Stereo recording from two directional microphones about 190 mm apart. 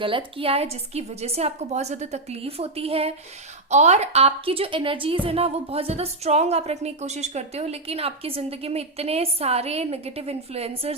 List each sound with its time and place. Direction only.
0.0 s a woman's voice: 25° right (ahead or behind)